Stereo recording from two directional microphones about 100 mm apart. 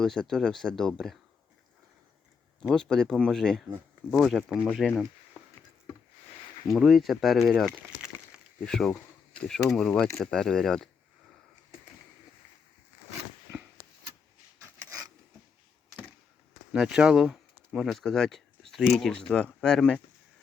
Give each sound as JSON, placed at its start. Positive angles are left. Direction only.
{"t": 0.0, "sound": "speech", "side_deg": 5}
{"t": 2.6, "sound": "speech", "side_deg": 5}
{"t": 6.7, "sound": "speech", "side_deg": 0}
{"t": 14.6, "sound": "a sound", "side_deg": -30}
{"t": 16.7, "sound": "speech", "side_deg": -5}